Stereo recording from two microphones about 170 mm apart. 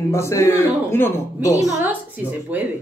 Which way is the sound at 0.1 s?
15° left (ahead or behind).